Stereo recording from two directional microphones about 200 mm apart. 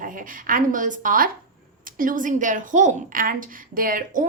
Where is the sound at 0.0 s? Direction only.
40° right (ahead or behind).